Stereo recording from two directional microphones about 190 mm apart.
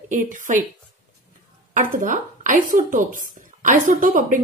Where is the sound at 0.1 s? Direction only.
40° right (ahead or behind).